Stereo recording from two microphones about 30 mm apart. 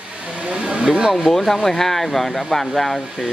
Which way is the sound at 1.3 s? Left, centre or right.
Centre.